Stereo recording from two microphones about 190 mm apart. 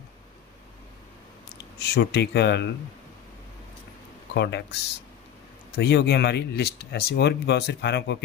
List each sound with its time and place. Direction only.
1.8 s speech: 60° left (ahead or behind)
4.4 s speech: 60° left (ahead or behind)